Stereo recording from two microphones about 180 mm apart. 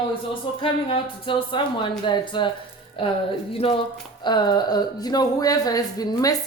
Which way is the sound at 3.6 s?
30° left (ahead or behind).